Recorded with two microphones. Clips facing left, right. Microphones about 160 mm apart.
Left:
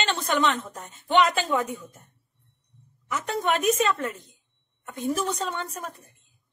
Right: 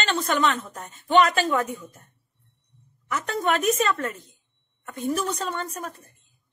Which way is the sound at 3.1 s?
20° left (ahead or behind).